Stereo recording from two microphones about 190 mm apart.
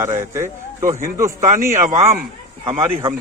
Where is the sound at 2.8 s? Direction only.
10° right (ahead or behind).